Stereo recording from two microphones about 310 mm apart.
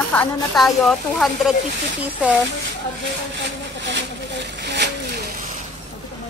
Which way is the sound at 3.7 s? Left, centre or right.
Right.